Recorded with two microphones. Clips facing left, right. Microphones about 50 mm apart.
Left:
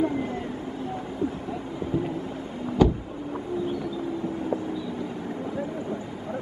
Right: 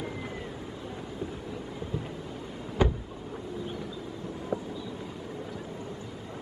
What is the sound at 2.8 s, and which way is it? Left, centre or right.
Vehicle, centre.